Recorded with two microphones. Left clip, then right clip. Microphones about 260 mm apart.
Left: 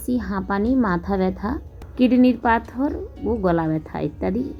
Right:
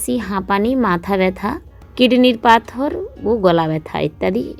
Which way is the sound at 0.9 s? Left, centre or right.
Right.